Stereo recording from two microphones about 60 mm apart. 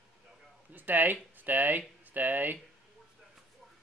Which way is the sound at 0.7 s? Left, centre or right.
Right.